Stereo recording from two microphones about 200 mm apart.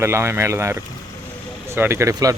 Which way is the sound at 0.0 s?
15° right (ahead or behind).